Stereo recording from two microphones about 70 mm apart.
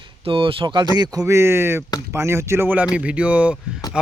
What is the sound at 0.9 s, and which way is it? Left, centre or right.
Speech, right.